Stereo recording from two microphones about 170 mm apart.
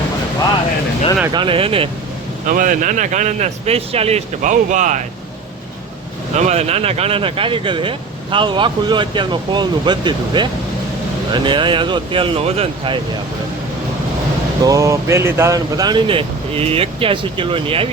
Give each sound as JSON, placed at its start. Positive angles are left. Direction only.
{"t": 1.3, "sound": "speech", "side_deg": -30}
{"t": 2.5, "sound": "speech", "side_deg": -50}
{"t": 6.3, "sound": "speech", "side_deg": -40}
{"t": 14.6, "sound": "speech", "side_deg": -20}